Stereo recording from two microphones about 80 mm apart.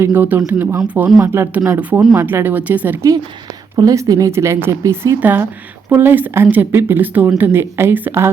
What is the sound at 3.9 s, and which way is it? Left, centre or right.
A woman's voice, right.